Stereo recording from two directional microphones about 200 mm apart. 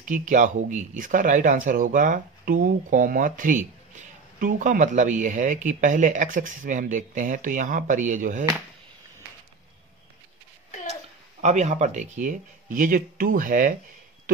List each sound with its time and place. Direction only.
0.0 s speech: 40° right (ahead or behind)
11.4 s speech: 35° right (ahead or behind)